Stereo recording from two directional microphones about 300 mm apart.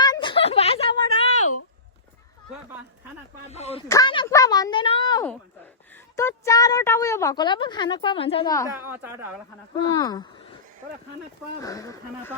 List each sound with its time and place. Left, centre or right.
0.0 s a sound: centre
3.5 s a woman's voice: left
8.9 s speech: centre
9.9 s a woman's voice: centre
11.6 s a woman's voice: centre